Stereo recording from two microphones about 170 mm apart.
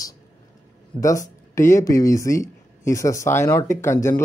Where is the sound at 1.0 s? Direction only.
20° left (ahead or behind).